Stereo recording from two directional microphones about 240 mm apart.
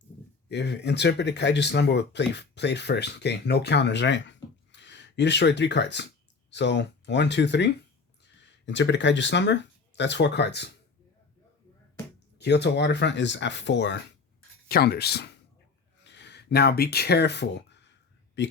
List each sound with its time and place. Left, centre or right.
0.4 s speech: left
12.4 s speech: left